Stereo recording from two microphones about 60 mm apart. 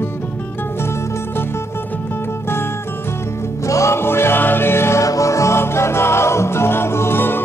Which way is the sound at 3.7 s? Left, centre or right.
Left.